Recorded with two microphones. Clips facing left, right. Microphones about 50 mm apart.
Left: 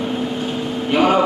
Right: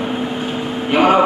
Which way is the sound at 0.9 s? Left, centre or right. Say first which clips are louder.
Right 3 dB; right.